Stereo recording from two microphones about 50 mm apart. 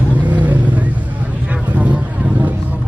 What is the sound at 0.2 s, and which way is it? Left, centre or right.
Vehicle, right.